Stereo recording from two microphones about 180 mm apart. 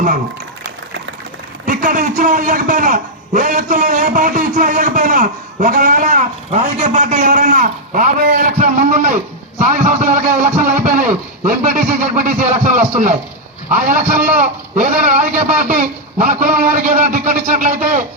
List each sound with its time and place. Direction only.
1.6 s a man's voice: 45° right (ahead or behind)
9.7 s a sound: 40° right (ahead or behind)
11.4 s a man's voice: 45° right (ahead or behind)